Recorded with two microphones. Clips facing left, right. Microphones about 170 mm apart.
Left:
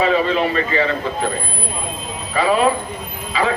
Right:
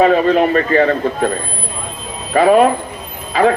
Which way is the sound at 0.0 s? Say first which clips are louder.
Right 5 dB; 50° right (ahead or behind).